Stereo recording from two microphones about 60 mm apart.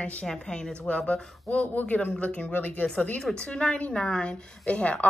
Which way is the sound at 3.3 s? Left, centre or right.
Centre.